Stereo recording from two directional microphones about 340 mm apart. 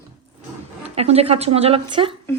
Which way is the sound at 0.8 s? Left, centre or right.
Centre.